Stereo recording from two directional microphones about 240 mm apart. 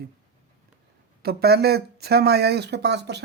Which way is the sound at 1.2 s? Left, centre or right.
Right.